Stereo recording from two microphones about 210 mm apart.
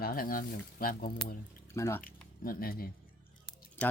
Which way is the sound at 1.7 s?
15° left (ahead or behind).